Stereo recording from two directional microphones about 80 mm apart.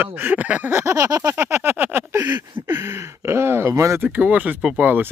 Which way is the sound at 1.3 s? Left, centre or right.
Right.